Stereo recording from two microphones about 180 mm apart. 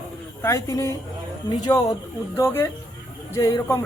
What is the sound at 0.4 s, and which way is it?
A woman's voice, 15° left (ahead or behind).